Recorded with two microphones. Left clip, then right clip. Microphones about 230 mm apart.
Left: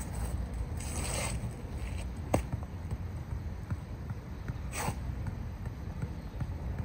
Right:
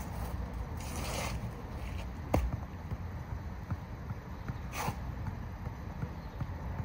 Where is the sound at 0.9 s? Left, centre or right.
Left.